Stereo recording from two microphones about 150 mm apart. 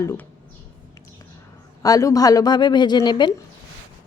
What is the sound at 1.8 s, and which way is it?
A woman's voice, 25° left (ahead or behind).